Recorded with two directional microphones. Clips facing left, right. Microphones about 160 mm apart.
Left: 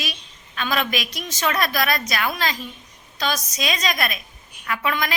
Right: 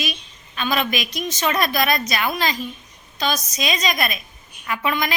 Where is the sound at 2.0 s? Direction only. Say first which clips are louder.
Right 2 dB; centre (ahead or behind).